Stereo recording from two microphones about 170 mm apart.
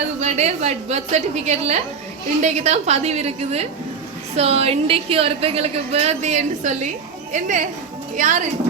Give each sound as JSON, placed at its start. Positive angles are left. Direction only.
{"t": 0.2, "sound": "a woman's voice", "side_deg": -40}